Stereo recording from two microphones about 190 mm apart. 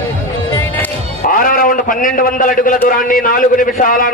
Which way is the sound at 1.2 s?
45° left (ahead or behind).